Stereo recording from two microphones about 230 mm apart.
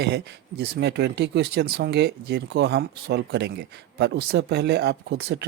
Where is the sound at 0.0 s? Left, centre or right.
Right.